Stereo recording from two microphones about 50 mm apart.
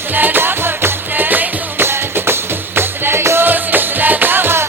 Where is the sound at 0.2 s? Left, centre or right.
Right.